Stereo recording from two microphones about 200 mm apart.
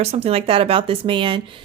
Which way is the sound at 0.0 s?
30° right (ahead or behind).